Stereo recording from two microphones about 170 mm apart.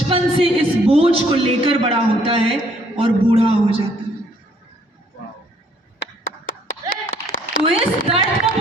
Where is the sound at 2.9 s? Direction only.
35° right (ahead or behind).